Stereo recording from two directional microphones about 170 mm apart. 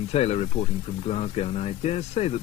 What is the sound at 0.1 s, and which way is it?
Speech, 35° left (ahead or behind).